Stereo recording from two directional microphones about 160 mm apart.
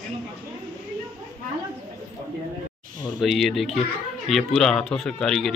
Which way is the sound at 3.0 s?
Centre (ahead or behind).